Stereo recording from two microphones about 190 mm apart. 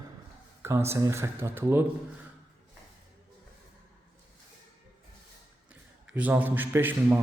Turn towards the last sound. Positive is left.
turn(degrees=-10)  # may be behind; listen again after turning